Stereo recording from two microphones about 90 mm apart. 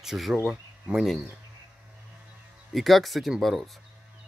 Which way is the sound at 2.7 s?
Centre (ahead or behind).